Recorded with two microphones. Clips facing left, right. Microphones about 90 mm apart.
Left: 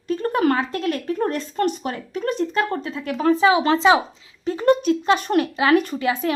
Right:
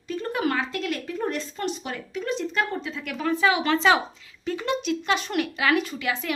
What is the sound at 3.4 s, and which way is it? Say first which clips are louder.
Speech: left 3 dB; 25° left (ahead or behind).